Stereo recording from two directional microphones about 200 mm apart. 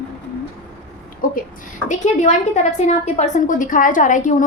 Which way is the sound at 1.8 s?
35° left (ahead or behind).